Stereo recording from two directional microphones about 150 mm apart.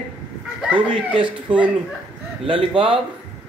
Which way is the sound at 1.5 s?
35° right (ahead or behind).